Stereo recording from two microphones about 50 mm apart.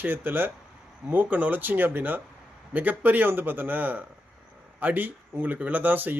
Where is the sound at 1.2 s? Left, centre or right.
Right.